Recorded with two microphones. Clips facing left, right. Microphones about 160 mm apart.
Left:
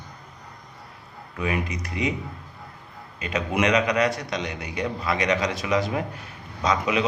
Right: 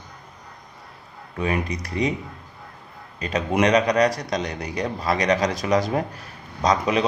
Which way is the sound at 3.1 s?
35° right (ahead or behind).